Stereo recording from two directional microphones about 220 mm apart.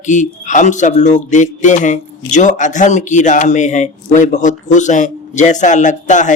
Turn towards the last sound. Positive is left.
turn(degrees=35)  # may be behind; listen again after turning